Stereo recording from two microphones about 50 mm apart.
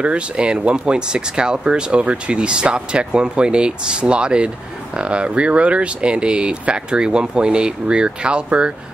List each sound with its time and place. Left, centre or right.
0.0 s speech: right